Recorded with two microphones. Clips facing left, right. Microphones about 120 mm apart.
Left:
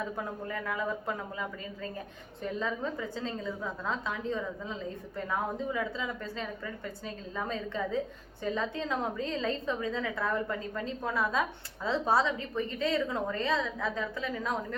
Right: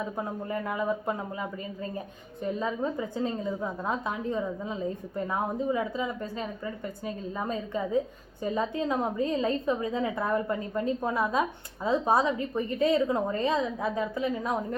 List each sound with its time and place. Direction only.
0.2 s a woman's voice: 25° right (ahead or behind)